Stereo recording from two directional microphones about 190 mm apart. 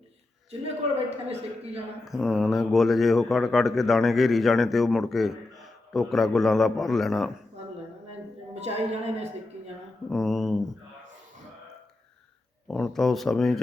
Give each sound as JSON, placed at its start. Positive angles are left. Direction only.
{"t": 0.9, "sound": "a man's voice", "side_deg": -30}
{"t": 2.0, "sound": "speech", "side_deg": 0}
{"t": 8.5, "sound": "a man's voice", "side_deg": -35}
{"t": 10.1, "sound": "speech", "side_deg": 0}
{"t": 12.6, "sound": "speech", "side_deg": 0}